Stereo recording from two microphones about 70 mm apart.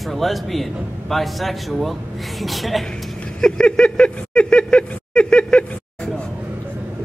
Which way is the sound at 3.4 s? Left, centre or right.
Centre.